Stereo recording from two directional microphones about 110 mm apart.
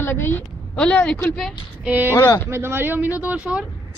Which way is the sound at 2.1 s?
20° left (ahead or behind).